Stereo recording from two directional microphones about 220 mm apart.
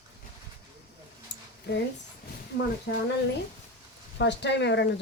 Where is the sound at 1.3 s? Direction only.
55° left (ahead or behind).